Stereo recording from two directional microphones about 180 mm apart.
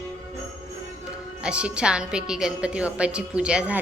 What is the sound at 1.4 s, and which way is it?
A woman's voice, 5° right (ahead or behind).